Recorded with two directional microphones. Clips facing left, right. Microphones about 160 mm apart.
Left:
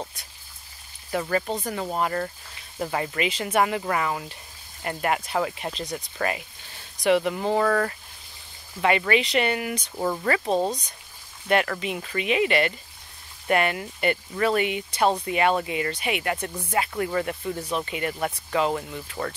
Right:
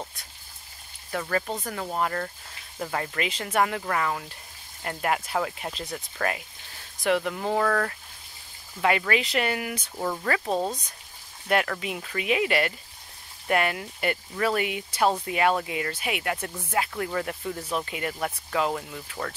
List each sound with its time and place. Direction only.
1.1 s speech: 5° left (ahead or behind)
5.9 s speech: 15° left (ahead or behind)
7.0 s speech: 5° left (ahead or behind)